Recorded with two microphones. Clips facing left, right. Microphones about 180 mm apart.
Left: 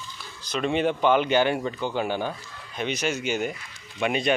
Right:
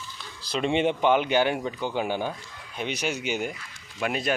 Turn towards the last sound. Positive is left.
turn(degrees=0)  # may be behind; listen again after turning